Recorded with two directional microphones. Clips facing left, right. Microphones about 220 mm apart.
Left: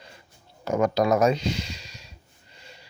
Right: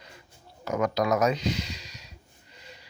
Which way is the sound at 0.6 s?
30° left (ahead or behind).